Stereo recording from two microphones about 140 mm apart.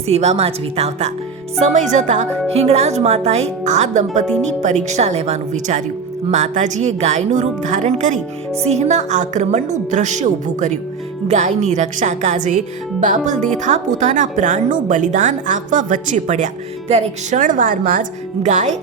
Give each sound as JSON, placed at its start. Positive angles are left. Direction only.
{"t": 0.1, "sound": "a woman's voice", "side_deg": -50}
{"t": 2.5, "sound": "a woman's voice", "side_deg": -45}
{"t": 16.9, "sound": "a woman's voice", "side_deg": -45}
{"t": 17.4, "sound": "a woman's voice", "side_deg": -75}
{"t": 18.4, "sound": "speech", "side_deg": -55}